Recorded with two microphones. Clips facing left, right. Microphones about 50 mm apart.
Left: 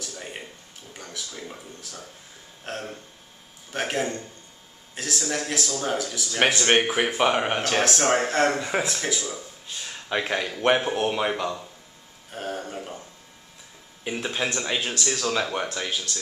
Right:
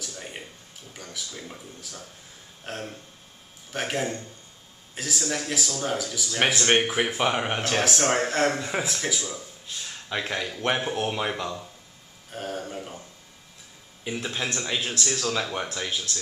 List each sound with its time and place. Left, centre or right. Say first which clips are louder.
0.0 s a sound: left 1 dB; centre
1.1 s a man's voice: left 1 dB; centre
14.0 s speech: left 2 dB; centre